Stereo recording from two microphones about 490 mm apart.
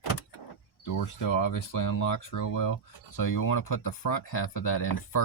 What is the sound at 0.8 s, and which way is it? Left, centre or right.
Speech, left.